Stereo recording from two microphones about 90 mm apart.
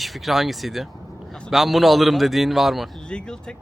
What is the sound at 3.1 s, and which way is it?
Speech, 10° left (ahead or behind).